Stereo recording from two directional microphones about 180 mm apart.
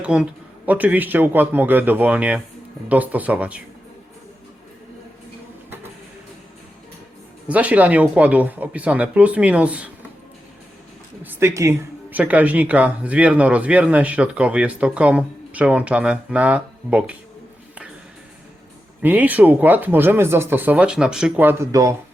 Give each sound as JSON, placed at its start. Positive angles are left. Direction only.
{"t": 0.0, "sound": "speech", "side_deg": -5}
{"t": 7.4, "sound": "speech", "side_deg": -10}
{"t": 11.2, "sound": "speech", "side_deg": -10}
{"t": 19.0, "sound": "speech", "side_deg": -10}